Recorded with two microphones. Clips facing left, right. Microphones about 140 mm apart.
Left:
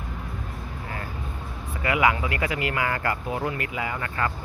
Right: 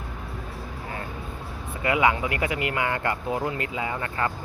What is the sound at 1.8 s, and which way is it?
Speech, 25° right (ahead or behind).